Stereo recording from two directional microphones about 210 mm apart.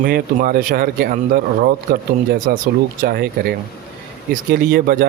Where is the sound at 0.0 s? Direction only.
45° right (ahead or behind).